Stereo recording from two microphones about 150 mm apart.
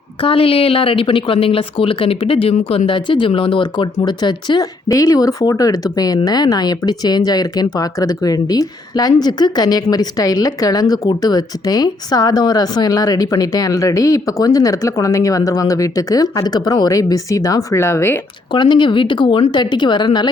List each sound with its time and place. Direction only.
0.2 s a woman's voice: 35° left (ahead or behind); by 18.2 s 15° left (ahead or behind)
18.5 s a woman's voice: 30° left (ahead or behind)